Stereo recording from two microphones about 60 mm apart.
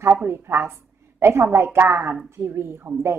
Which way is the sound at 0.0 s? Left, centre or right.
Right.